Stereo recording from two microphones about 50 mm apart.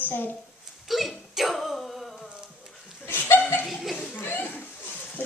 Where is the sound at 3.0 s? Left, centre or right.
Left.